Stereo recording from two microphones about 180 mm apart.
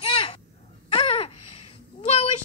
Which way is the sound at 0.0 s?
30° left (ahead or behind).